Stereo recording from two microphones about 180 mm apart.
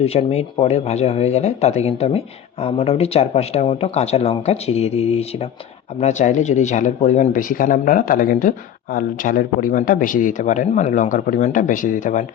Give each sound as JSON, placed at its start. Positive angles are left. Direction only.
{"t": 0.0, "sound": "speech", "side_deg": 35}